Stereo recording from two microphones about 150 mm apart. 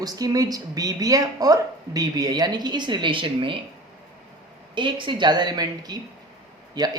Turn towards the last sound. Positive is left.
turn(degrees=-25)  # may be behind; listen again after turning